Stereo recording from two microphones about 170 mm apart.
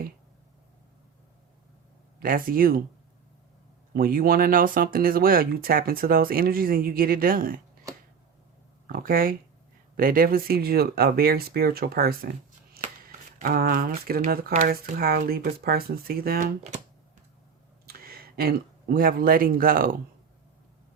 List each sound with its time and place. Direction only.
2.1 s speech: 55° right (ahead or behind)
3.9 s speech: 60° right (ahead or behind)
8.9 s speech: 60° right (ahead or behind)
17.8 s speech: 60° right (ahead or behind)